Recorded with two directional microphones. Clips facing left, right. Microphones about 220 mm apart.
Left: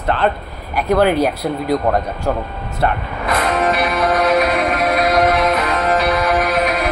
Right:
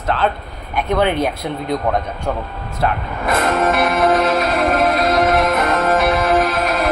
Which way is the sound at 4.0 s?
25° right (ahead or behind).